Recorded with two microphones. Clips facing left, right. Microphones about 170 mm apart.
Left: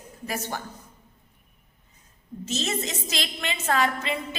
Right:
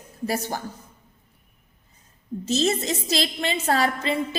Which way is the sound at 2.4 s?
35° right (ahead or behind).